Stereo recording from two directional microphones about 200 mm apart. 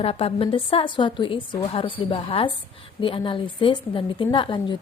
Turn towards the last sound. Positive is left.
turn(degrees=25)  # may be behind; listen again after turning